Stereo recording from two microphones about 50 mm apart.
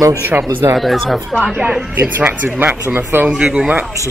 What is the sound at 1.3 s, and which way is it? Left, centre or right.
Speech, centre.